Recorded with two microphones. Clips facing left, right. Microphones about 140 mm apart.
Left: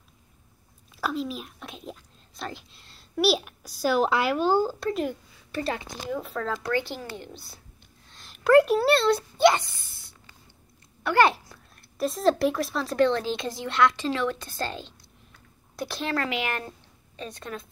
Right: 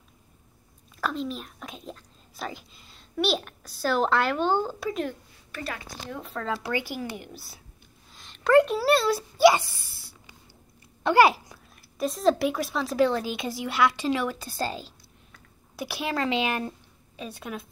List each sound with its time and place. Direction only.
0.9 s a child's voice: 5° left (ahead or behind)
5.5 s a woman's voice: 30° left (ahead or behind)
6.0 s speech: centre (ahead or behind)
8.1 s a sound: 5° left (ahead or behind)
8.8 s speech: 5° right (ahead or behind)
11.2 s a woman's voice: 5° right (ahead or behind)
16.2 s speech: 20° right (ahead or behind)
17.2 s speech: 10° right (ahead or behind)